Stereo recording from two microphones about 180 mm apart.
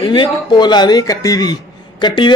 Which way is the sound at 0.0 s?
25° left (ahead or behind).